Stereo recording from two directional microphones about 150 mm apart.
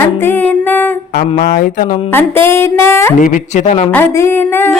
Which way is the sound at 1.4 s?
70° left (ahead or behind).